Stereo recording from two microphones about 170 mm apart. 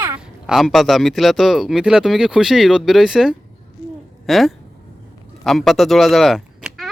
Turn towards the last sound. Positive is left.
turn(degrees=0)  # may be behind; listen again after turning